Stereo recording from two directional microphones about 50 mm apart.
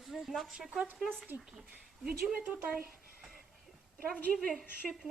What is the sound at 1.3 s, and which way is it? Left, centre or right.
Speech, right.